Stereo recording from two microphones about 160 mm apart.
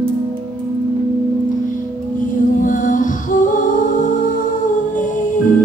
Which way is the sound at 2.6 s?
55° left (ahead or behind).